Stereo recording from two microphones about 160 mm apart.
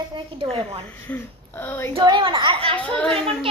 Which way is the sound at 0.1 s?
35° right (ahead or behind).